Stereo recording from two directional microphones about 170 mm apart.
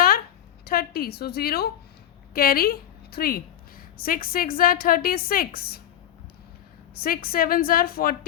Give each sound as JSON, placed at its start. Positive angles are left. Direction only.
{"t": 0.6, "sound": "a woman's voice", "side_deg": 60}
{"t": 6.9, "sound": "a woman's voice", "side_deg": 60}